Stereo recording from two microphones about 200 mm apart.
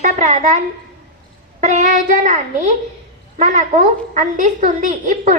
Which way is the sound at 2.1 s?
40° right (ahead or behind).